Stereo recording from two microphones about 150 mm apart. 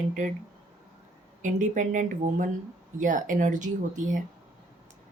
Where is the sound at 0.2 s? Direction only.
55° right (ahead or behind).